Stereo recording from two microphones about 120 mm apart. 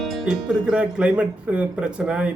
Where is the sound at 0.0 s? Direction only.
Centre (ahead or behind).